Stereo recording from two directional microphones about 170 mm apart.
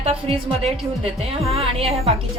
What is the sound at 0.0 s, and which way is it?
A woman's voice, 35° right (ahead or behind).